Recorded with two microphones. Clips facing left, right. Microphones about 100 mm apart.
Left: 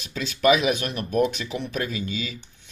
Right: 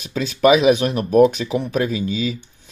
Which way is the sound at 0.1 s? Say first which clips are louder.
Right 5 dB; 45° right (ahead or behind).